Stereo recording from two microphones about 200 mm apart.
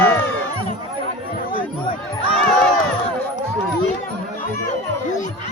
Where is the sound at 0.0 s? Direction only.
10° left (ahead or behind).